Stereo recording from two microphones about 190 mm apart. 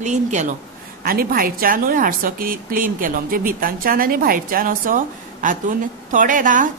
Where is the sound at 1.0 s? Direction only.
50° right (ahead or behind).